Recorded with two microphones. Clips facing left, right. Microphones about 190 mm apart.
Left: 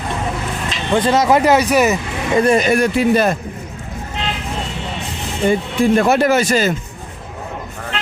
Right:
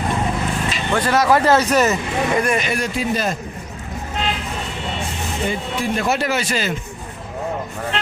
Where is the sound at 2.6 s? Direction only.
55° left (ahead or behind).